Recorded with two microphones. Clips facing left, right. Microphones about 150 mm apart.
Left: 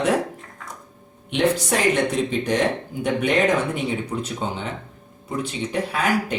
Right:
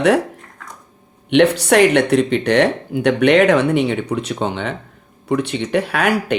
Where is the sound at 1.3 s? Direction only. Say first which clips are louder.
Right 8 dB; 70° right (ahead or behind).